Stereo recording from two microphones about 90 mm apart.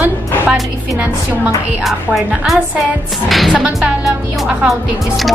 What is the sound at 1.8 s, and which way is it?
A woman's voice, centre (ahead or behind).